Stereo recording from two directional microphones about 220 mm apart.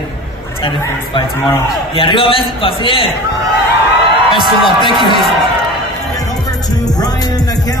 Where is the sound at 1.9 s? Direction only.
25° left (ahead or behind).